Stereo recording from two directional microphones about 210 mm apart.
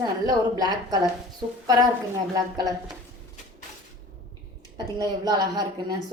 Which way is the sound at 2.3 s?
15° right (ahead or behind).